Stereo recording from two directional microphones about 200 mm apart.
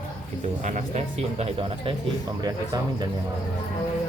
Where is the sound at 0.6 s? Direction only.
40° right (ahead or behind).